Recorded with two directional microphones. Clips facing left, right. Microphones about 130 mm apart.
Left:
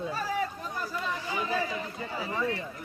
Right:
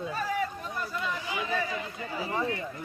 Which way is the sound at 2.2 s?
30° right (ahead or behind).